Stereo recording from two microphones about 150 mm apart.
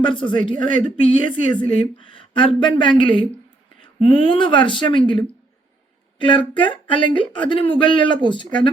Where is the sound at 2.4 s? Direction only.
35° left (ahead or behind).